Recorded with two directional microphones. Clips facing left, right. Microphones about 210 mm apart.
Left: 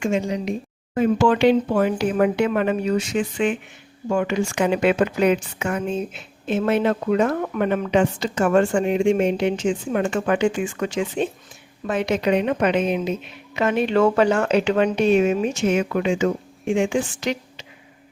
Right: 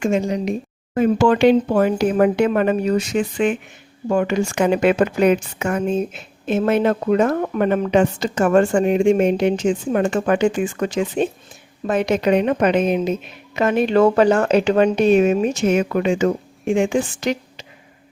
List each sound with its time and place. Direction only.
0.0 s a woman's voice: 40° right (ahead or behind)